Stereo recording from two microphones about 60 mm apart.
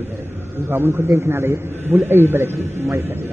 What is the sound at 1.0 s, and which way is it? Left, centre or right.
A man's voice, right.